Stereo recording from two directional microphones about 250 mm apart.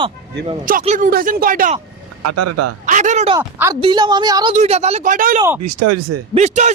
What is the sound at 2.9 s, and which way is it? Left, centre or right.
Speech, right.